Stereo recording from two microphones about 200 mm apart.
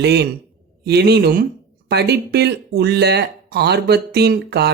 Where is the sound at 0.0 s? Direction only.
55° right (ahead or behind).